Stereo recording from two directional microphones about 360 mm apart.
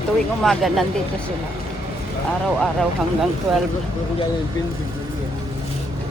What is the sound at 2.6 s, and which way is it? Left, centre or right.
Speech, centre.